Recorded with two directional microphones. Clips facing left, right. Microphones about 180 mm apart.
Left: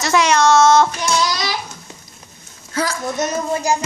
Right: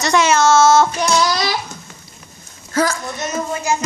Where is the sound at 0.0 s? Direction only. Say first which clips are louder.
Right 1 dB; centre (ahead or behind).